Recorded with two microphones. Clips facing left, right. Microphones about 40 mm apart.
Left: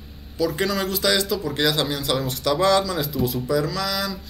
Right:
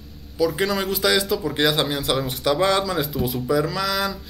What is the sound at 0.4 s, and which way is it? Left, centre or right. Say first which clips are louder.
Speech: right 1 dB; centre.